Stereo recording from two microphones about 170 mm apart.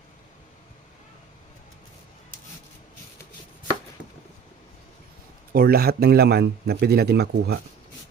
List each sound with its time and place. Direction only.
5.5 s speech: 65° right (ahead or behind)